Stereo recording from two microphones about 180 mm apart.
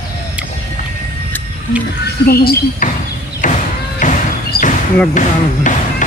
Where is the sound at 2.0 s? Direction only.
60° left (ahead or behind).